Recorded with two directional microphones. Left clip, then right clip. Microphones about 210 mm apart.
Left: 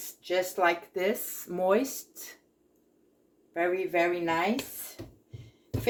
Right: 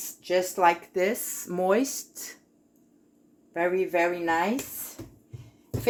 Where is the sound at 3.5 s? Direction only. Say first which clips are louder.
Right 2 dB; 40° right (ahead or behind).